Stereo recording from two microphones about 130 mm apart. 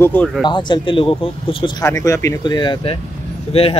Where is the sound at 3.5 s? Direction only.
45° left (ahead or behind).